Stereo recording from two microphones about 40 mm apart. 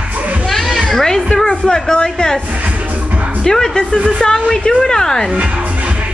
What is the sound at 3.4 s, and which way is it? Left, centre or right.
A woman's voice, centre.